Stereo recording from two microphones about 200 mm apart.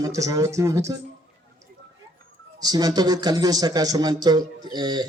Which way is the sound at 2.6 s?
20° right (ahead or behind).